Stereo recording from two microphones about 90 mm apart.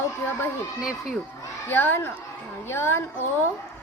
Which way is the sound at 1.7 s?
25° left (ahead or behind).